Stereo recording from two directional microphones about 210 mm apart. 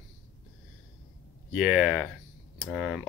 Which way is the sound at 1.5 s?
5° right (ahead or behind).